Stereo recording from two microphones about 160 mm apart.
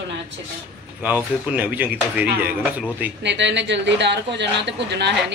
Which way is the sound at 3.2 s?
90° right.